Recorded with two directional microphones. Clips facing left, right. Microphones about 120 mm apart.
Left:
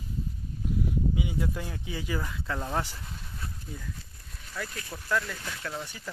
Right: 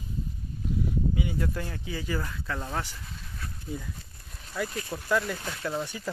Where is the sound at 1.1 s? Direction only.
10° left (ahead or behind).